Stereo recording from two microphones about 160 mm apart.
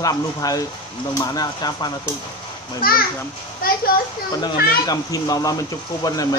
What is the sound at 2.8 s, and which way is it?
Speech, 65° left (ahead or behind).